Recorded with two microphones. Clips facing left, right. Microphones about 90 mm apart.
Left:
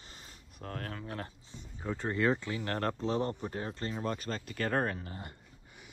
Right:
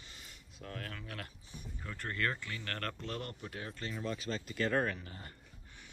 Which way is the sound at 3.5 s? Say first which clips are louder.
Left 5 dB; 35° left (ahead or behind).